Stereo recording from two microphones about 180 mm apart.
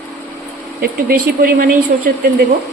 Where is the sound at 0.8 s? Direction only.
55° right (ahead or behind).